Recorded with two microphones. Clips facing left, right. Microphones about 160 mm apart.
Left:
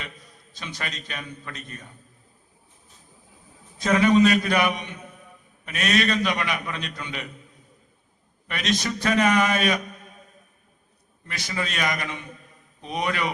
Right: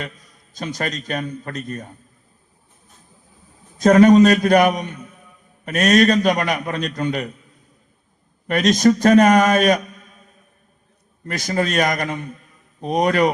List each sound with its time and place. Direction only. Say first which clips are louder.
0.5 s a man's voice: right 9 dB; 45° right (ahead or behind)
3.8 s a man's voice: right 8 dB; 45° right (ahead or behind)
8.4 s a man's voice: right 12 dB; 45° right (ahead or behind)
11.3 s a man's voice: right 9 dB; 45° right (ahead or behind)